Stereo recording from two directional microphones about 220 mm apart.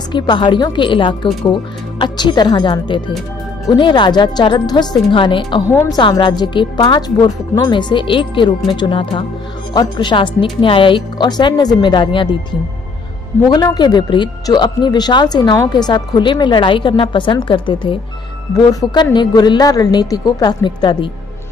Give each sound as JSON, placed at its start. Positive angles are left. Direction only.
{"t": 0.1, "sound": "speech", "side_deg": 20}
{"t": 13.5, "sound": "speech", "side_deg": 20}